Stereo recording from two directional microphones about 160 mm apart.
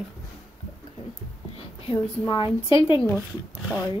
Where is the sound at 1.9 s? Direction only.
30° left (ahead or behind).